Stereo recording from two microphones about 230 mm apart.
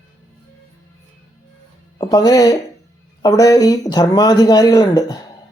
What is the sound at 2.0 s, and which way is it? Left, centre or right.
Speech, centre.